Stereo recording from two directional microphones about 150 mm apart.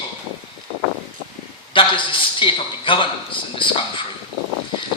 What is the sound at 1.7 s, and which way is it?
A man's voice, 35° left (ahead or behind).